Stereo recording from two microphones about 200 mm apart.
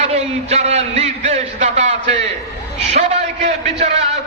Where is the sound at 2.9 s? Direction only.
35° right (ahead or behind).